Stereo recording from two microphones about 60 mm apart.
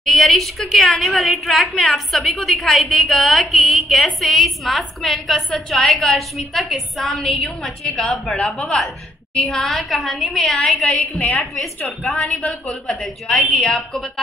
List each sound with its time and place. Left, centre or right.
0.0 s a woman's voice: centre
12.2 s speech: left
12.6 s a woman's voice: centre